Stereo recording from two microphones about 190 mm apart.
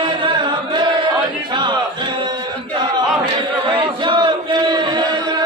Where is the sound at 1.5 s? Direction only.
25° right (ahead or behind).